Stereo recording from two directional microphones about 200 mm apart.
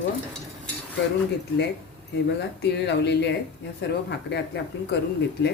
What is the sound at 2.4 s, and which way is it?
Speech, 60° left (ahead or behind).